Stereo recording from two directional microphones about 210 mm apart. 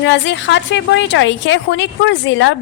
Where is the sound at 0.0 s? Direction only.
60° left (ahead or behind).